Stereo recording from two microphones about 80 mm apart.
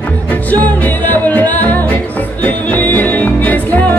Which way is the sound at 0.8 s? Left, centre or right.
Left.